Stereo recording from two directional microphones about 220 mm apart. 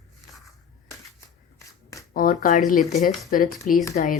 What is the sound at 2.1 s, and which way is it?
Speech, 40° left (ahead or behind).